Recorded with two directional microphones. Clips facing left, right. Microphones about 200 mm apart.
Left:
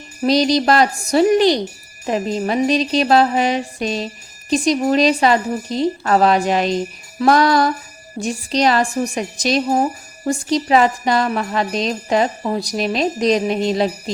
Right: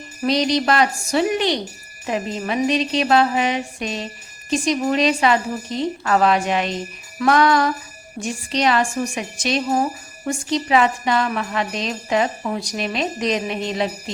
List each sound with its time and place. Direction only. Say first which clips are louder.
0.3 s music: left 4 dB; 35° left (ahead or behind)